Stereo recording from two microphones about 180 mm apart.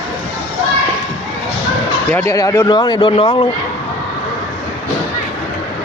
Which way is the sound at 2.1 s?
15° left (ahead or behind).